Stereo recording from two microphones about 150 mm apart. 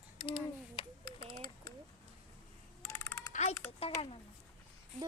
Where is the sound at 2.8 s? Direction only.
20° left (ahead or behind).